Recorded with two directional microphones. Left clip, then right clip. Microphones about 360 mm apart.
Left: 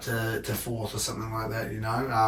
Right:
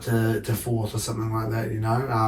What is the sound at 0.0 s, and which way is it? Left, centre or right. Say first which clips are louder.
Speech: right 5 dB; centre.